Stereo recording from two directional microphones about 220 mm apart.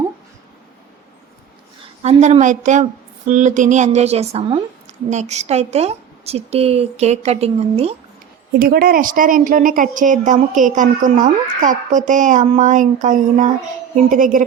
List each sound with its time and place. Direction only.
2.0 s a woman's voice: 30° right (ahead or behind)
8.5 s a woman's voice: 40° right (ahead or behind)